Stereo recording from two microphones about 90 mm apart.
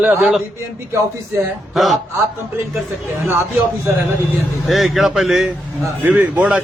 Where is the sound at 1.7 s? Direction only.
Centre (ahead or behind).